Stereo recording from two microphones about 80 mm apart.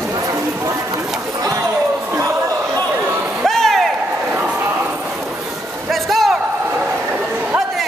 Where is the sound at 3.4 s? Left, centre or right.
Centre.